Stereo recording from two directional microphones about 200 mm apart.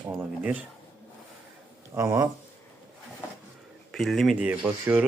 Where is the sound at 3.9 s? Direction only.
Centre (ahead or behind).